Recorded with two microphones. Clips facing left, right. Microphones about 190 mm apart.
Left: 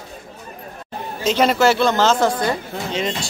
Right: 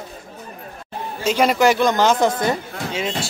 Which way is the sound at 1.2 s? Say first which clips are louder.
Even; 10° right (ahead or behind).